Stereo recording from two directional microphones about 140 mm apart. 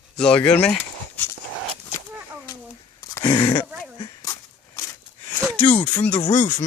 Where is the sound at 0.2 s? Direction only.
5° left (ahead or behind).